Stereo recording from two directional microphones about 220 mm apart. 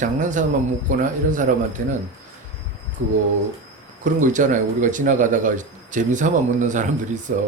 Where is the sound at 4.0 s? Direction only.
35° right (ahead or behind).